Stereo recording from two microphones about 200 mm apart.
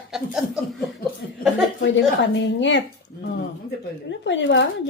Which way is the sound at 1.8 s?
65° left (ahead or behind).